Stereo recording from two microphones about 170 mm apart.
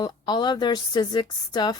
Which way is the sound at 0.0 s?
25° left (ahead or behind).